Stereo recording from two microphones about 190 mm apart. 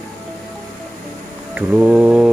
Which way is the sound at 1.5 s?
5° right (ahead or behind).